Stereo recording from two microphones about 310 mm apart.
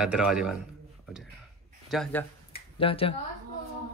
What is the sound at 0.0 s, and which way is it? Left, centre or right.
Speech, centre.